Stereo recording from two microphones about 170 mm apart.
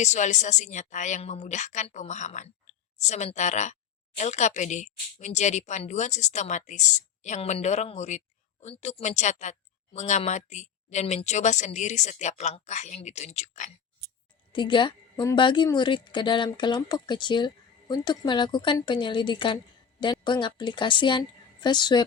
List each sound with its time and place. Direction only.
0.0 s a woman's voice: 45° left (ahead or behind)
14.5 s speech: 30° left (ahead or behind)
15.1 s speech: 15° left (ahead or behind)
15.4 s speech: 25° left (ahead or behind)